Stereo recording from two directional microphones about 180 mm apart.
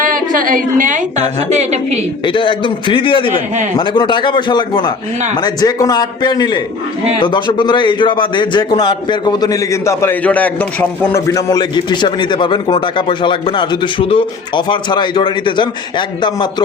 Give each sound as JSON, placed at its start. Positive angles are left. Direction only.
{"t": 0.0, "sound": "a woman's voice", "side_deg": -50}
{"t": 2.2, "sound": "speech", "side_deg": 25}